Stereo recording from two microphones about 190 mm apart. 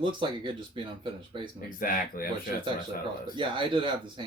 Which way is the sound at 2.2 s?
50° left (ahead or behind).